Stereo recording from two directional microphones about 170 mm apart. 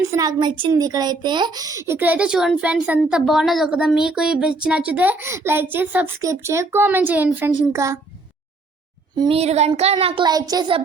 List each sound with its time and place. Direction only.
0.1 s a woman's voice: 20° right (ahead or behind)
9.1 s a woman's voice: 25° right (ahead or behind)
9.4 s child singing: 40° right (ahead or behind)